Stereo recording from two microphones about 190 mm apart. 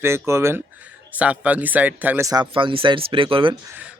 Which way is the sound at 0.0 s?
15° right (ahead or behind).